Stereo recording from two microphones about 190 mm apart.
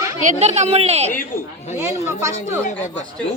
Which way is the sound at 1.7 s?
15° right (ahead or behind).